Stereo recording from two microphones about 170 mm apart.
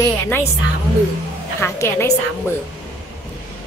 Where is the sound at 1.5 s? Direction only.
15° left (ahead or behind).